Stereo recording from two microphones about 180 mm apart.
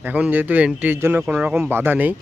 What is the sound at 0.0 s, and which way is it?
Speech, 10° right (ahead or behind).